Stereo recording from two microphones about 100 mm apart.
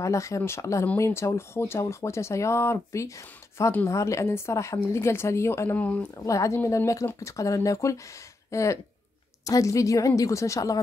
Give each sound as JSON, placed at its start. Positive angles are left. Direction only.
{"t": 0.0, "sound": "a woman's voice", "side_deg": 30}
{"t": 6.1, "sound": "a woman's voice", "side_deg": 35}